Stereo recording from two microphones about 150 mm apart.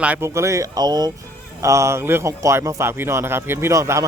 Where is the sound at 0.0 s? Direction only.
15° right (ahead or behind).